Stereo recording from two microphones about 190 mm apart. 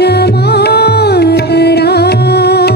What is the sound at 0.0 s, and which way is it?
Music, 60° left (ahead or behind).